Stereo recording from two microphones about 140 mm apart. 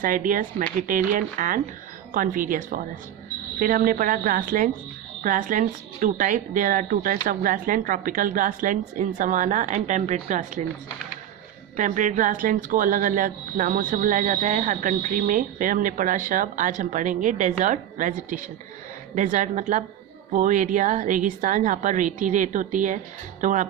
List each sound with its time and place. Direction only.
0.0 s speech: 75° right (ahead or behind)
5.2 s speech: 70° right (ahead or behind)
11.8 s a woman's voice: 65° right (ahead or behind)